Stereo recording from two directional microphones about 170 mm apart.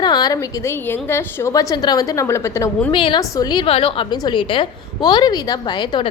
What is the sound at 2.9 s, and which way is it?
A woman's voice, 30° left (ahead or behind).